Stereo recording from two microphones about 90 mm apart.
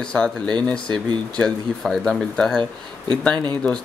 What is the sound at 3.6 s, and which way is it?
Speech, centre (ahead or behind).